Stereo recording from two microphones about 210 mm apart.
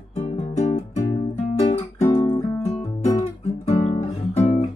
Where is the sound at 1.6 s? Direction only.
25° left (ahead or behind).